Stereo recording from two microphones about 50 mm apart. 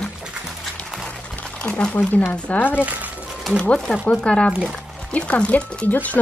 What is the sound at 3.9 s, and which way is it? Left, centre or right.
Speech, left.